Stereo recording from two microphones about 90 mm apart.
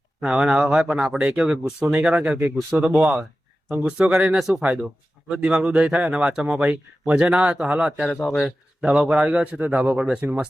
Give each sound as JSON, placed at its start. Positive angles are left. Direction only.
{"t": 0.2, "sound": "speech", "side_deg": -10}
{"t": 8.1, "sound": "speech", "side_deg": 5}